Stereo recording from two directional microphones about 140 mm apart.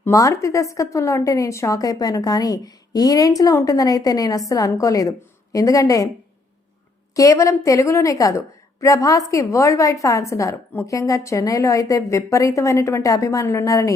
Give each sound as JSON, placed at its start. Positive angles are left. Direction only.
{"t": 0.0, "sound": "a woman's voice", "side_deg": 20}
{"t": 7.2, "sound": "a woman's voice", "side_deg": 25}